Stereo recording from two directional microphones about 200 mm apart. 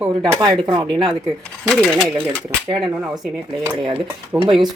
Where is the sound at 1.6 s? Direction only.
5° left (ahead or behind).